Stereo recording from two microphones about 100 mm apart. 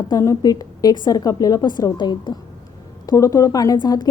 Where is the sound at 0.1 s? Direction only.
35° left (ahead or behind).